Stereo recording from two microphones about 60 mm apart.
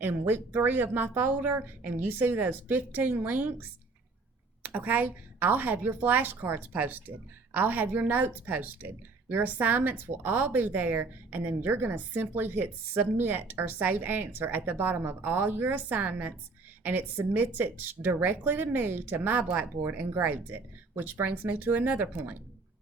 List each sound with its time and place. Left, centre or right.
0.0 s speech: right
19.8 s speech: right